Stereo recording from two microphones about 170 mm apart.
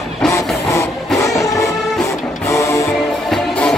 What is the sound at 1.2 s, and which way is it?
Music, 20° left (ahead or behind).